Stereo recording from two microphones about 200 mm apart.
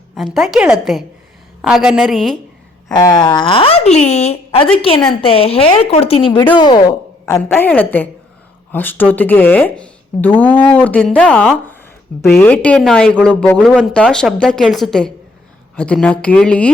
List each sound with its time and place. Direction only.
0.3 s speech: 5° right (ahead or behind)
2.9 s a woman's voice: 20° left (ahead or behind)